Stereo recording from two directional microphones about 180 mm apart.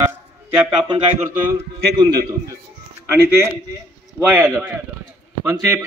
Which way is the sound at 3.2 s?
15° right (ahead or behind).